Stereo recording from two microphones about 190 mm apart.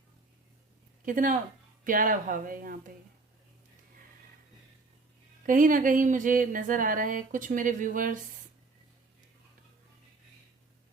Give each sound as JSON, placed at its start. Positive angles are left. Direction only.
{"t": 1.0, "sound": "speech", "side_deg": -45}
{"t": 5.5, "sound": "speech", "side_deg": -45}